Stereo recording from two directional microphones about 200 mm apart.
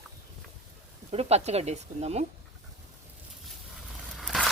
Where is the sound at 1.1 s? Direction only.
30° right (ahead or behind).